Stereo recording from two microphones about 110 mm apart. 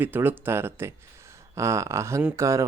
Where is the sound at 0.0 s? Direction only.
20° right (ahead or behind).